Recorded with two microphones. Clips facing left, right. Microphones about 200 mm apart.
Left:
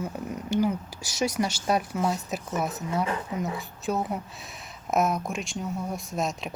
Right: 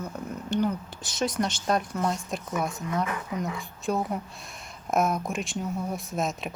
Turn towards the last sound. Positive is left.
turn(degrees=0)  # may be behind; listen again after turning